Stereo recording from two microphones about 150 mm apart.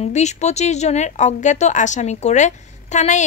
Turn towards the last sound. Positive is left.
turn(degrees=55)  # may be behind; listen again after turning